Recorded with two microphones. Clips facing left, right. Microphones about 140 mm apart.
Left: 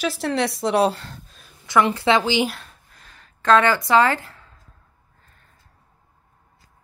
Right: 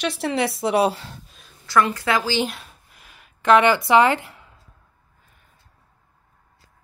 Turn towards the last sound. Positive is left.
turn(degrees=-10)  # may be behind; listen again after turning